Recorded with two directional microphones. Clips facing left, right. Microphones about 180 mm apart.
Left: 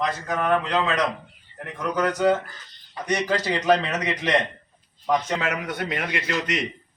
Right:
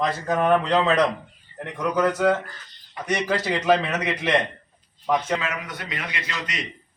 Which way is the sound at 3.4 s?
5° right (ahead or behind).